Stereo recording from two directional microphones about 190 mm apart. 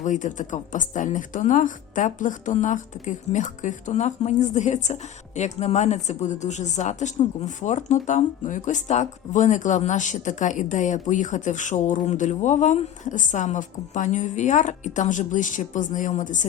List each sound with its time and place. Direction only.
0.0 s speech: 40° left (ahead or behind)